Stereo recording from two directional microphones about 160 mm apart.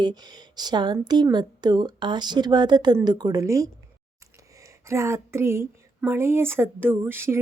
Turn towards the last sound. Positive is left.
turn(degrees=-15)  # may be behind; listen again after turning